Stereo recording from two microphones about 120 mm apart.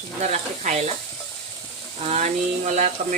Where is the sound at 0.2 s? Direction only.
70° right (ahead or behind).